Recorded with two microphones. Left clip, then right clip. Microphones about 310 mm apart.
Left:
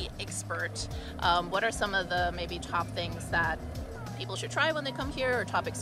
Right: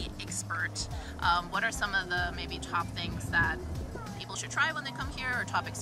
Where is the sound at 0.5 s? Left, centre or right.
Centre.